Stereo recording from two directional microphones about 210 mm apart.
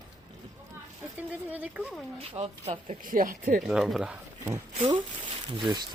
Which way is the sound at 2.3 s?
25° right (ahead or behind).